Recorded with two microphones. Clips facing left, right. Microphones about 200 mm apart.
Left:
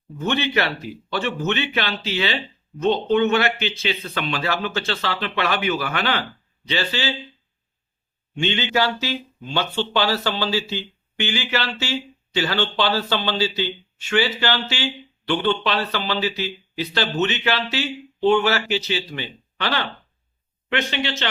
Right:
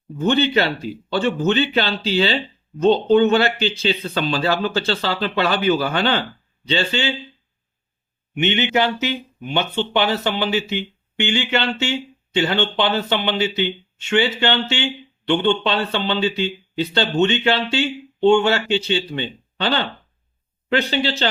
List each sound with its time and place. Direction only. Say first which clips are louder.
0.3 s speech: right 5 dB; 30° right (ahead or behind)
8.4 s speech: right 3 dB; 20° right (ahead or behind)